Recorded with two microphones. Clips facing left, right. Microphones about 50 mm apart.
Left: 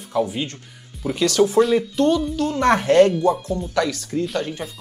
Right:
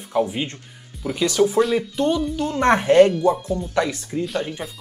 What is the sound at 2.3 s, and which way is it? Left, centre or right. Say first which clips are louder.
Speech: even; right.